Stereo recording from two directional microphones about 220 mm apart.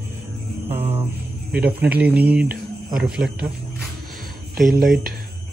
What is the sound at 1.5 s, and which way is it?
Speech, 45° right (ahead or behind).